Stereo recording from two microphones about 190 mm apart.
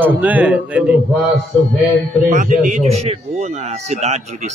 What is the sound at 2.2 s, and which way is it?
Speech, 45° right (ahead or behind).